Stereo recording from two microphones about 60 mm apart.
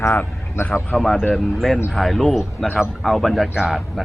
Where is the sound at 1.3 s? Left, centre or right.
Centre.